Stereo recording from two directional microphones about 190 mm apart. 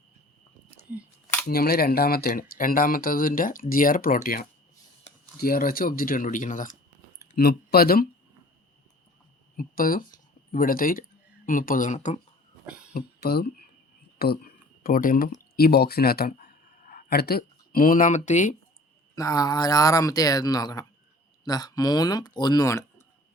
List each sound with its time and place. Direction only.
1.5 s speech: 55° left (ahead or behind)
7.3 s speech: 55° left (ahead or behind)
9.6 s speech: 50° left (ahead or behind)
12.6 s cough: 5° right (ahead or behind)
12.9 s speech: 55° left (ahead or behind)
16.4 s a sound: 45° left (ahead or behind)
19.1 s speech: 20° left (ahead or behind)